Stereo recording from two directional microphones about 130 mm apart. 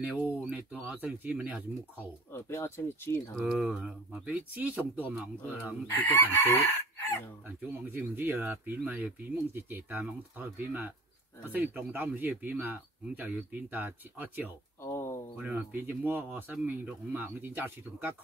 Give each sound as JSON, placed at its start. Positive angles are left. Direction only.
{"t": 0.0, "sound": "speech", "side_deg": -10}
{"t": 2.3, "sound": "speech", "side_deg": 20}
{"t": 3.3, "sound": "speech", "side_deg": 0}
{"t": 6.1, "sound": "chicken", "side_deg": 15}
{"t": 7.4, "sound": "speech", "side_deg": -15}
{"t": 14.8, "sound": "a sound", "side_deg": 20}
{"t": 15.3, "sound": "speech", "side_deg": -10}